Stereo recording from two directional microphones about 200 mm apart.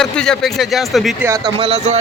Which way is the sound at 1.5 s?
30° right (ahead or behind).